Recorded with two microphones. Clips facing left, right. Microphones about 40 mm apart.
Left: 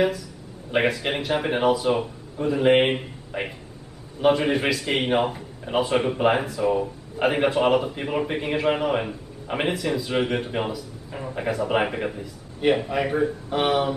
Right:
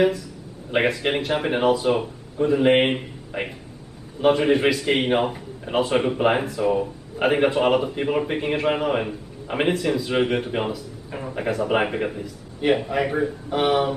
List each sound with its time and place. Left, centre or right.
0.8 s speech: centre